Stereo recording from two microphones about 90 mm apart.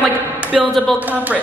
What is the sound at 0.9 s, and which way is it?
Speech, 20° right (ahead or behind).